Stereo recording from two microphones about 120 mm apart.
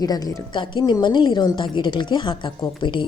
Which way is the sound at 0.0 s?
30° left (ahead or behind).